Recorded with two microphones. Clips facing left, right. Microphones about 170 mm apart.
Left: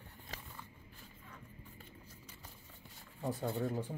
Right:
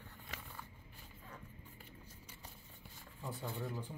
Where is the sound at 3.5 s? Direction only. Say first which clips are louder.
Left 6 dB; 60° left (ahead or behind).